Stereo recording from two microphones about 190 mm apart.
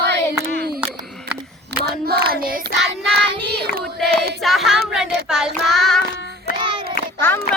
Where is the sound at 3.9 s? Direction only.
Centre (ahead or behind).